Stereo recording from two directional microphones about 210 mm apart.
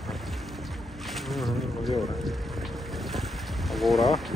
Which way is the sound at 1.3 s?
Centre (ahead or behind).